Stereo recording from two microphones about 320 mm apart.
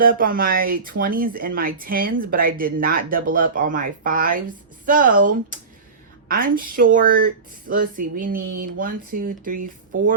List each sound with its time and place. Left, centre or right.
0.0 s speech: right